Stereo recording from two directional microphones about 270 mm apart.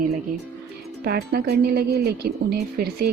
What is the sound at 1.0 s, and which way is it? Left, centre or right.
Speech, right.